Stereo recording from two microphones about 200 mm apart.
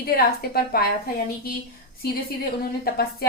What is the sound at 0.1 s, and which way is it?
Speech, 50° left (ahead or behind).